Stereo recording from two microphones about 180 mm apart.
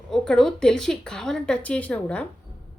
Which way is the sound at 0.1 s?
Centre (ahead or behind).